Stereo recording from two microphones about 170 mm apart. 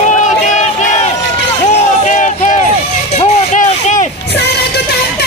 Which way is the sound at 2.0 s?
45° left (ahead or behind).